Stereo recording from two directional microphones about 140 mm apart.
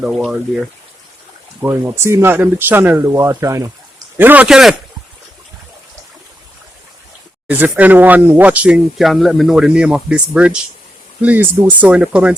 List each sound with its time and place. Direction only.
0.0 s speech: 5° right (ahead or behind)
1.6 s speech: 20° right (ahead or behind); by 4.7 s 5° right (ahead or behind)
7.4 s speech: 10° right (ahead or behind)